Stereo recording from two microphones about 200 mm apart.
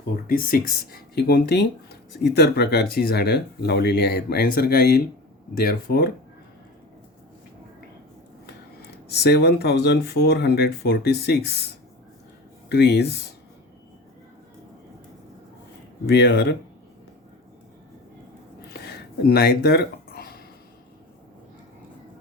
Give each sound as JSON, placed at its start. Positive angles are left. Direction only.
{"t": 0.3, "sound": "speech", "side_deg": 45}
{"t": 8.4, "sound": "speech", "side_deg": 55}
{"t": 16.0, "sound": "speech", "side_deg": 55}
{"t": 19.2, "sound": "speech", "side_deg": 50}